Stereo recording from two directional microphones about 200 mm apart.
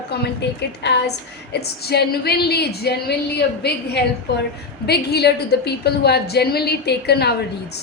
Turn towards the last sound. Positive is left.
turn(degrees=55)  # may be behind; listen again after turning